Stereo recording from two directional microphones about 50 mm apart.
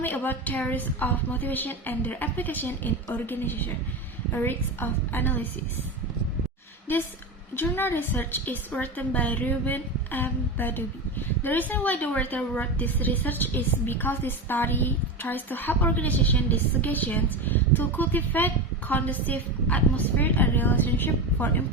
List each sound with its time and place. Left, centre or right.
0.0 s a woman's voice: left
7.5 s a woman's voice: left